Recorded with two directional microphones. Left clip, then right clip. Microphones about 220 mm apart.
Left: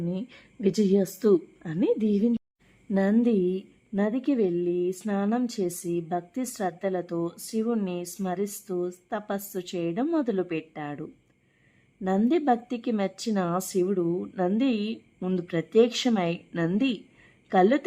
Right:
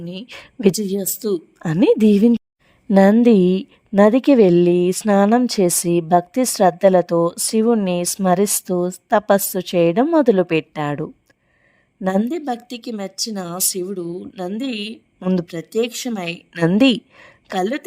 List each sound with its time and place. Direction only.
0.0 s speech: 50° right (ahead or behind)
0.8 s speech: centre (ahead or behind)
1.5 s speech: 50° right (ahead or behind)
13.0 s speech: centre (ahead or behind)
14.7 s speech: 50° right (ahead or behind)
15.5 s speech: centre (ahead or behind)
16.5 s a woman's voice: 45° right (ahead or behind)